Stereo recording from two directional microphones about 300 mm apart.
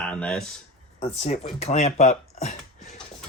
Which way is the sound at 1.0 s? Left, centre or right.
Left.